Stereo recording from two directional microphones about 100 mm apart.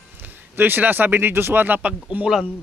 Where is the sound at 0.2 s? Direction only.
20° right (ahead or behind).